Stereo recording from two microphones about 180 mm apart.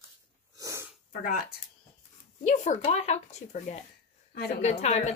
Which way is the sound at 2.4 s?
40° left (ahead or behind).